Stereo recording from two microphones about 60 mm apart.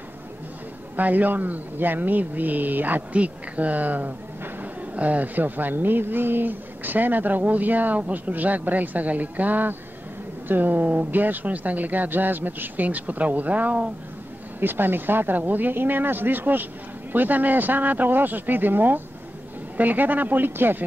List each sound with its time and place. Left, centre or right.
0.9 s speech: right
14.6 s speech: right